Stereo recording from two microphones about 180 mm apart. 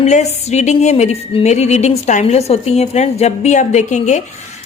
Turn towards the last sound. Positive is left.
turn(degrees=40)  # may be behind; listen again after turning